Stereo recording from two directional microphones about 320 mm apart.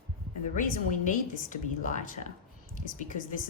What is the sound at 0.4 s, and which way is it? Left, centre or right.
A woman's voice, left.